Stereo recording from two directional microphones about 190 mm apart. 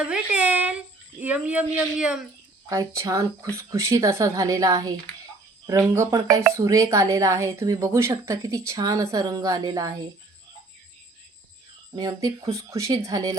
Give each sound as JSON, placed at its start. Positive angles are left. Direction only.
{"t": 0.0, "sound": "speech", "side_deg": -5}
{"t": 11.9, "sound": "speech", "side_deg": -20}